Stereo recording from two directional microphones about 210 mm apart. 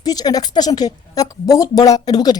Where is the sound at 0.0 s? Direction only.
20° left (ahead or behind).